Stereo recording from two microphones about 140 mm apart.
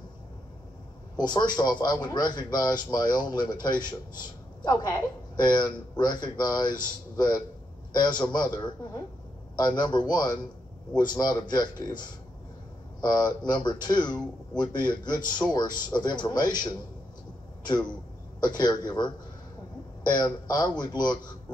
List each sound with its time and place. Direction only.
1.1 s a man's voice: 30° left (ahead or behind)
13.0 s a man's voice: 30° left (ahead or behind)
18.4 s a man's voice: 30° left (ahead or behind)